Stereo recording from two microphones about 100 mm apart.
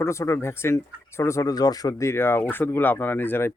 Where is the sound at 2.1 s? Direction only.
25° left (ahead or behind).